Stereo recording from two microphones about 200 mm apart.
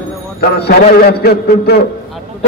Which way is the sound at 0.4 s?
50° left (ahead or behind).